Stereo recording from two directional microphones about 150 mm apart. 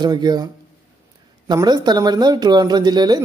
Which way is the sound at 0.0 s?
25° right (ahead or behind).